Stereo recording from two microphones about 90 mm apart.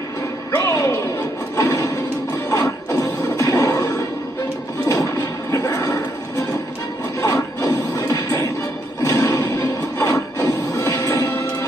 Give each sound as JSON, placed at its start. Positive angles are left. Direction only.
{"t": 0.7, "sound": "music", "side_deg": 30}
{"t": 1.6, "sound": "a sound", "side_deg": 35}
{"t": 2.5, "sound": "music", "side_deg": 35}
{"t": 4.8, "sound": "horse", "side_deg": 30}
{"t": 7.2, "sound": "wood", "side_deg": 35}
{"t": 8.1, "sound": "music", "side_deg": 35}